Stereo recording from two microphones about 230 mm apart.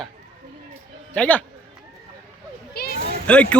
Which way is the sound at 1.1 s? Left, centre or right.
Centre.